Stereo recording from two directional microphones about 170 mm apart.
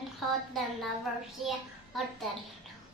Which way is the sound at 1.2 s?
Centre (ahead or behind).